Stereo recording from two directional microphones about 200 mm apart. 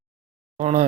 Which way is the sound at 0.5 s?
30° right (ahead or behind).